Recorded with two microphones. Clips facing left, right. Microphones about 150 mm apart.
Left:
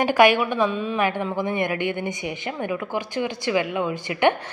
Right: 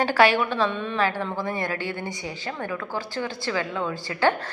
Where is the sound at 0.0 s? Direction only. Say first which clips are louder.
Left 3 dB; 15° left (ahead or behind).